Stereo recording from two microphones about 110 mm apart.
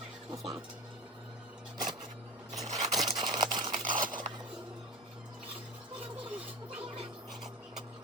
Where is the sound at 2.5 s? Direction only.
35° right (ahead or behind).